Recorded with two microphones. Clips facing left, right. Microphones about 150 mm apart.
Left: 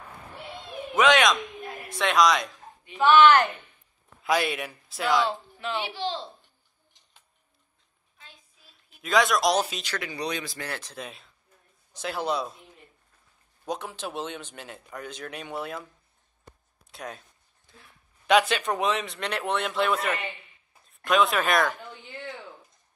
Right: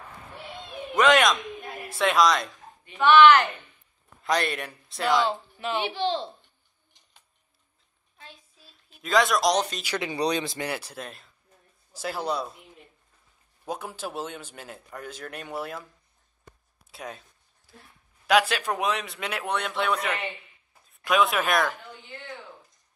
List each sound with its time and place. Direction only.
0.9 s a sound: centre (ahead or behind)
1.9 s speech: centre (ahead or behind)
3.0 s speech: 40° left (ahead or behind)
4.2 s speech: 5° left (ahead or behind)
5.9 s a child's voice: 65° right (ahead or behind)
9.0 s speech: centre (ahead or behind)
9.8 s speech: 20° right (ahead or behind)
10.1 s speech: 30° right (ahead or behind)
10.7 s speech: 10° right (ahead or behind)
13.7 s speech: 5° right (ahead or behind)
16.9 s a sound: centre (ahead or behind)
18.2 s speech: 5° right (ahead or behind)